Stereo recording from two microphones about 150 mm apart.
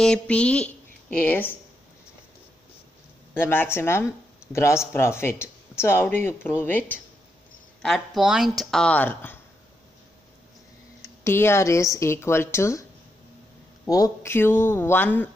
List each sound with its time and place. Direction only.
0.0 s speech: 5° left (ahead or behind)
3.3 s speech: 15° left (ahead or behind)
7.8 s speech: centre (ahead or behind)
11.2 s speech: 15° left (ahead or behind)
13.8 s speech: 25° left (ahead or behind)